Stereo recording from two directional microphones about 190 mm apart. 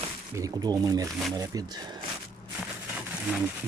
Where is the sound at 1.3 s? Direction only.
20° right (ahead or behind).